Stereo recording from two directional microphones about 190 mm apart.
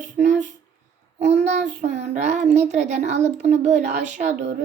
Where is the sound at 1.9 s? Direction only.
65° right (ahead or behind).